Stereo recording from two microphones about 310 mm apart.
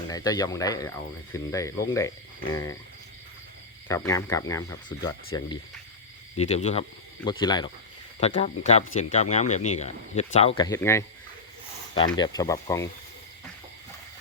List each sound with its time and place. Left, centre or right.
0.1 s speech: centre
3.8 s speech: centre
12.1 s speech: centre